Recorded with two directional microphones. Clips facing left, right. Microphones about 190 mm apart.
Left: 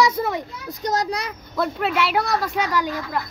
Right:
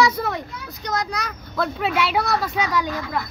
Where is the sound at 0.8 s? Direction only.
40° left (ahead or behind).